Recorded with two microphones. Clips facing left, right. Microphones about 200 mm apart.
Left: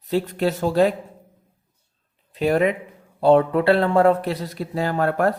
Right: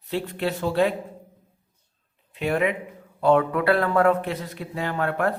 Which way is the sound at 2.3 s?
35° left (ahead or behind).